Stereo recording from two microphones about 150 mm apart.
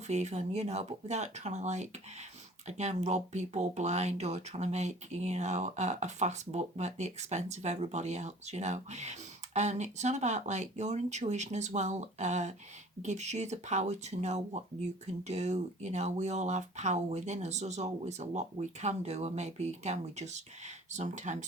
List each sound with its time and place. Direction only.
0.1 s speech: 50° right (ahead or behind)